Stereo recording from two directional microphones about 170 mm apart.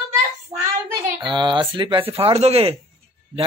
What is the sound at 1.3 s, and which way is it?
Speech, 30° right (ahead or behind).